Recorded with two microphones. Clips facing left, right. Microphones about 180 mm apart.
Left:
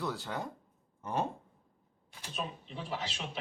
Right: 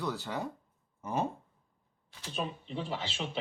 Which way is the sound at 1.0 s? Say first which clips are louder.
Right 1 dB; 5° right (ahead or behind).